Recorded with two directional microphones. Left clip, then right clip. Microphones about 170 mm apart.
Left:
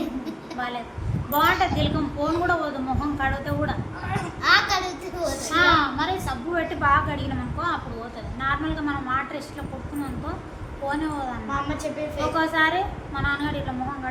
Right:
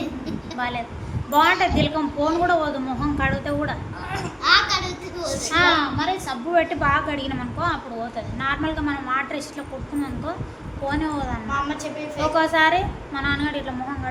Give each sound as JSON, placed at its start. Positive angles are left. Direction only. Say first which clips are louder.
{"t": 1.3, "sound": "a woman's voice", "louder": "right 3 dB", "side_deg": -20}
{"t": 4.4, "sound": "a sound", "louder": "right 1 dB", "side_deg": 55}
{"t": 5.5, "sound": "a woman's voice", "louder": "right 1 dB", "side_deg": -15}
{"t": 8.4, "sound": "a woman's voice", "louder": "right 1 dB", "side_deg": -20}
{"t": 10.8, "sound": "a woman's voice", "louder": "right 2 dB", "side_deg": -20}
{"t": 11.5, "sound": "a woman's voice", "louder": "right 2 dB", "side_deg": 10}
{"t": 12.3, "sound": "a woman's voice", "louder": "right 4 dB", "side_deg": -25}